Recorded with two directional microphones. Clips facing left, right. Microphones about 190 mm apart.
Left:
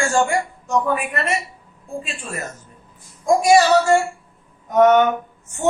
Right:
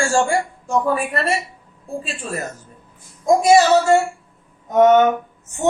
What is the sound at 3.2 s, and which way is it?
A man's voice, 20° right (ahead or behind).